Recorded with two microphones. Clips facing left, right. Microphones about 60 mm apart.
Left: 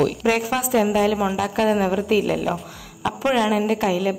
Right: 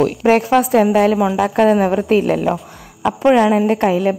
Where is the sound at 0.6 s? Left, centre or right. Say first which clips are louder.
Right 6 dB; right.